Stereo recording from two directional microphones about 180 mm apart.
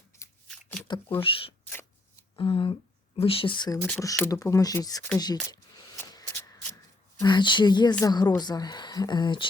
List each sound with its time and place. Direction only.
0.4 s a sound: centre (ahead or behind)
1.2 s speech: 30° left (ahead or behind)
3.8 s speech: 5° left (ahead or behind)
4.0 s speech: 20° left (ahead or behind)
5.1 s a sound: 20° left (ahead or behind)
7.2 s speech: 25° left (ahead or behind)